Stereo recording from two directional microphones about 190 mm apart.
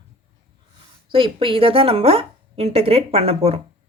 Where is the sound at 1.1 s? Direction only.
30° right (ahead or behind).